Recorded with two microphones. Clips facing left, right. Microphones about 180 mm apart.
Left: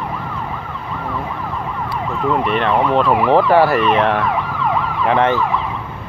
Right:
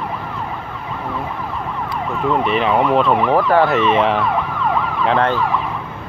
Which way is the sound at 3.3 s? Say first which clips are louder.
Left 2 dB; 20° left (ahead or behind).